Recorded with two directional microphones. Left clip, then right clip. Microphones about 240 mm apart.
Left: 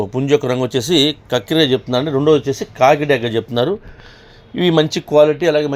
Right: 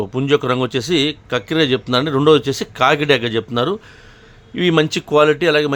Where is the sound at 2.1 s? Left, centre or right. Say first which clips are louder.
Right 1 dB; right.